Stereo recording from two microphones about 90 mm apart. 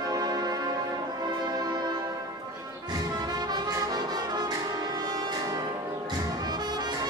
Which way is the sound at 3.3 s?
50° right (ahead or behind).